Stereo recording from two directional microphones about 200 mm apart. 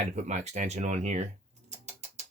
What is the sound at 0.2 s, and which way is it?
Speech, 35° right (ahead or behind).